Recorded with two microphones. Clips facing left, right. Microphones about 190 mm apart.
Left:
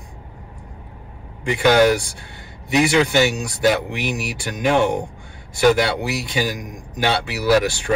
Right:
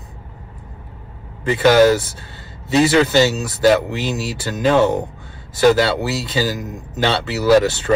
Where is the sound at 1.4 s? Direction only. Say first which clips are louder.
Right 3 dB; 15° left (ahead or behind).